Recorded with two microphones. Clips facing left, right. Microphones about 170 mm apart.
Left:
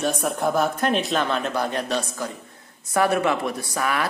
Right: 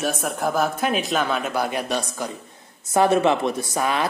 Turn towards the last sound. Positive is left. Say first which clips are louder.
# right 2 dB
turn(degrees=-20)  # may be behind; listen again after turning